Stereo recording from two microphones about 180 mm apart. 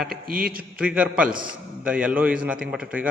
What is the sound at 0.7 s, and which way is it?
A man's voice, 5° right (ahead or behind).